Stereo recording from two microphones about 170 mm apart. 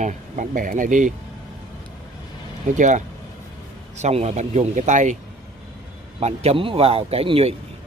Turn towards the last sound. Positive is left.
turn(degrees=-35)  # may be behind; listen again after turning